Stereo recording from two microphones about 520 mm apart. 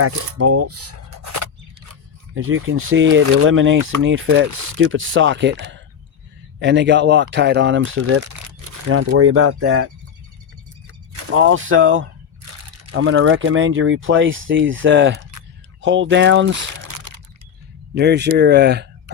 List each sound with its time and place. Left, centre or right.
0.0 s speech: right
11.3 s speech: right
16.5 s crumpling: right
17.9 s speech: centre